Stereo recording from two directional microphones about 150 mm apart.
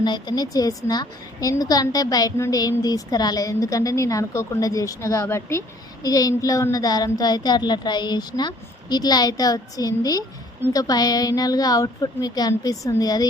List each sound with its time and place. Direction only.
0.0 s a woman's voice: 30° left (ahead or behind)